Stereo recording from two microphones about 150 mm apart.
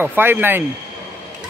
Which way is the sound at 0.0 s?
15° right (ahead or behind).